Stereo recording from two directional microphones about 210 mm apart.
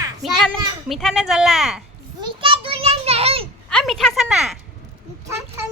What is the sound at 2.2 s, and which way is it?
Children playing, 25° right (ahead or behind).